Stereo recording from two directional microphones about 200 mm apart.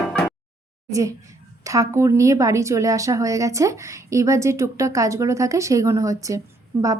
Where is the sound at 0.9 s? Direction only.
15° right (ahead or behind).